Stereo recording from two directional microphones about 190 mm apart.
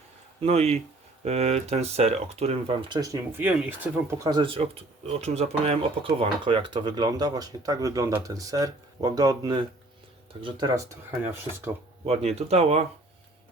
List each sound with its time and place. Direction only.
0.4 s speech: 35° right (ahead or behind)
3.0 s speech: 15° right (ahead or behind)
4.2 s speech: 20° right (ahead or behind)
12.0 s speech: 35° right (ahead or behind)